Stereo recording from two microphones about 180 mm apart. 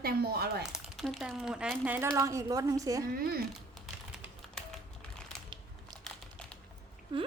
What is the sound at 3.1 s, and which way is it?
Speech, 60° right (ahead or behind).